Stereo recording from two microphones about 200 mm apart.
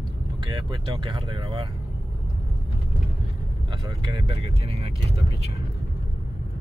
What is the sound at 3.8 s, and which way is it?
Speech, 20° right (ahead or behind).